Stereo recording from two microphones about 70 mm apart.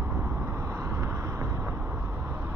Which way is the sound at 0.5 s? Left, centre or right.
Right.